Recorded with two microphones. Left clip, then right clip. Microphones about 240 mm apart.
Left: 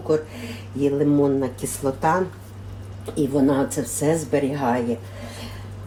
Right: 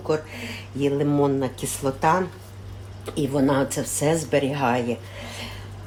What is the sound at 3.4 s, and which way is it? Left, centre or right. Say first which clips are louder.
Speech: left 1 dB; right.